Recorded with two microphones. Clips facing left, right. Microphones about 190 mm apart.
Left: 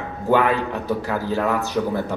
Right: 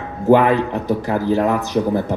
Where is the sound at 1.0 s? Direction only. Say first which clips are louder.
Right 7 dB; 20° right (ahead or behind).